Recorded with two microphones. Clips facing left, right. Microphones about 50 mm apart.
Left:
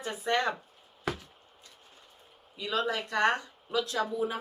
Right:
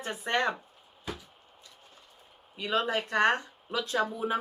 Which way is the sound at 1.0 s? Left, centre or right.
Left.